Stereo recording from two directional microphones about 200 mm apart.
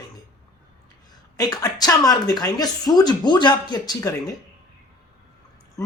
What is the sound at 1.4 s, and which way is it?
Speech, 20° left (ahead or behind).